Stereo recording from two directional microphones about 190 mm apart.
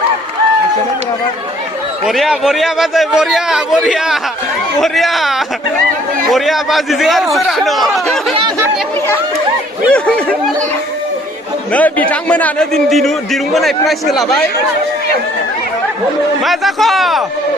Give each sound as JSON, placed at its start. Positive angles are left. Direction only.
{"t": 2.0, "sound": "a man's voice", "side_deg": 0}
{"t": 8.4, "sound": "chatter", "side_deg": -25}
{"t": 9.9, "sound": "speech", "side_deg": 5}
{"t": 11.7, "sound": "a man's voice", "side_deg": 10}
{"t": 16.4, "sound": "a man's voice", "side_deg": 0}